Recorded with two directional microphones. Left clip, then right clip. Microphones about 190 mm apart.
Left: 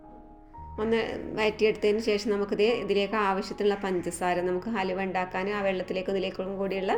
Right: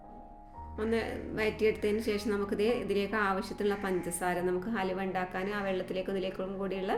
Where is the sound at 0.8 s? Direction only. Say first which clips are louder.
Left 5 dB; 10° left (ahead or behind).